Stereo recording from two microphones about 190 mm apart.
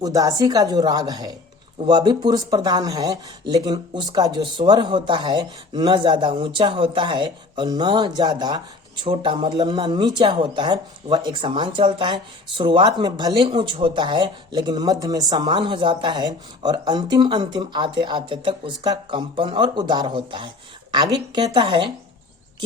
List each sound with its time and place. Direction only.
0.0 s speech: 20° right (ahead or behind)